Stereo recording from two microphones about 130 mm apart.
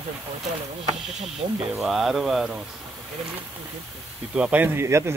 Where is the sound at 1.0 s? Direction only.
Centre (ahead or behind).